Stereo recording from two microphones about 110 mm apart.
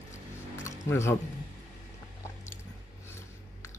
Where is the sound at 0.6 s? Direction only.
25° left (ahead or behind).